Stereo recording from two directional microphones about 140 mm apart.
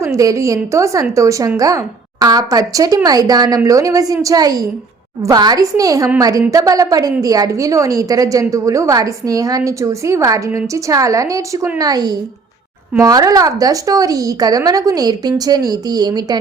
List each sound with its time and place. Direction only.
0.0 s a woman's voice: 20° right (ahead or behind)